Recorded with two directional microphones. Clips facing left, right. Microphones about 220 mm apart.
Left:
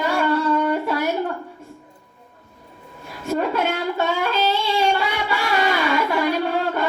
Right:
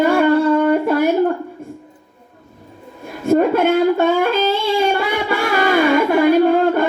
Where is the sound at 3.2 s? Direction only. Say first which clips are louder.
Right 8 dB; 50° right (ahead or behind).